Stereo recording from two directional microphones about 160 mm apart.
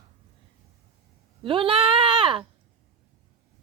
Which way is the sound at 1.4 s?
35° right (ahead or behind).